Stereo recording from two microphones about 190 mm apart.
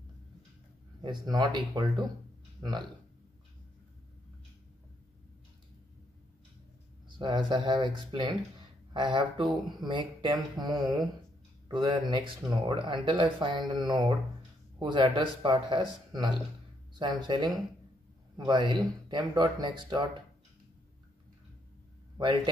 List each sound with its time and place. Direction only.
1.0 s speech: 20° right (ahead or behind)
7.2 s speech: 25° right (ahead or behind)
22.1 s a sound: 25° right (ahead or behind)